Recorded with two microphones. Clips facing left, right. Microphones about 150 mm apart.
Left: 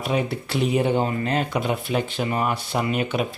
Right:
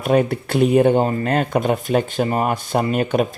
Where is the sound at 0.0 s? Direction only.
50° right (ahead or behind).